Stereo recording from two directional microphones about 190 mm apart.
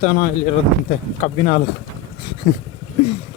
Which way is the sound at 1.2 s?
40° left (ahead or behind).